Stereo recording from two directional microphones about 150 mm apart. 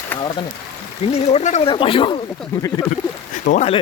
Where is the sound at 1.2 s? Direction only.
45° left (ahead or behind).